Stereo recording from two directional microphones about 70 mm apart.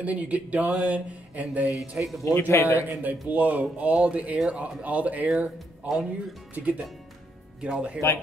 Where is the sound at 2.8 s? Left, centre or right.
Right; by 4.6 s centre.